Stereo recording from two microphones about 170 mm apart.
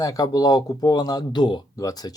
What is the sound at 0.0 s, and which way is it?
Speech, 20° left (ahead or behind).